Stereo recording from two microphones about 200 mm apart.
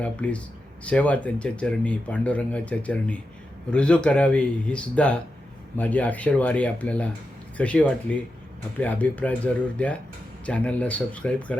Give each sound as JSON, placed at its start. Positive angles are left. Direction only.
{"t": 0.0, "sound": "speech", "side_deg": 5}